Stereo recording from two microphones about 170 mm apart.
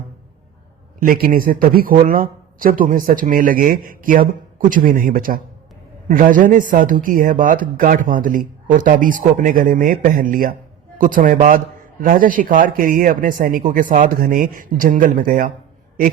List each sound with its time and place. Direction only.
0.9 s a man's voice: 55° right (ahead or behind)